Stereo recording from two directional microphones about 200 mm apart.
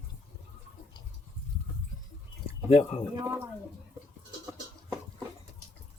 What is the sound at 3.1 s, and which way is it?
Speech, 15° right (ahead or behind).